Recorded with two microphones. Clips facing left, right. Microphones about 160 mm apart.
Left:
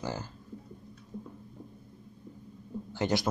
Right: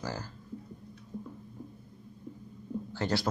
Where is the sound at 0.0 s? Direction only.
20° left (ahead or behind).